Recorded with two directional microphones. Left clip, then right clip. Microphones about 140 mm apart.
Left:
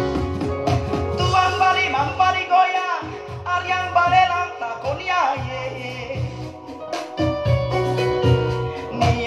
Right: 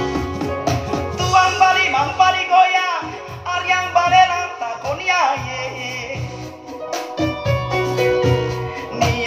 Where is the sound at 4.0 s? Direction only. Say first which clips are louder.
Right 3 dB; 15° right (ahead or behind).